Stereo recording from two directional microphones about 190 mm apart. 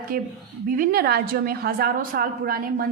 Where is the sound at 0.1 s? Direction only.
50° right (ahead or behind).